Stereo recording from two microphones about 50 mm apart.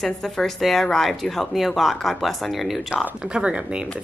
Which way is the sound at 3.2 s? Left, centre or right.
Centre.